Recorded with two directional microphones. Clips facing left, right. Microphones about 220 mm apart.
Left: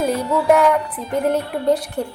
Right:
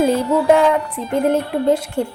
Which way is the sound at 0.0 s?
25° right (ahead or behind).